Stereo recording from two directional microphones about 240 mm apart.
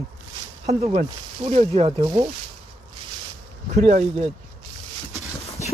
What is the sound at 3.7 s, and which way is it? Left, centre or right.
Speech, right.